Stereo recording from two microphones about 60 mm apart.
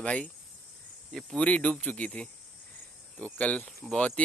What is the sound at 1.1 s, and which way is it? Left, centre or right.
Speech, centre.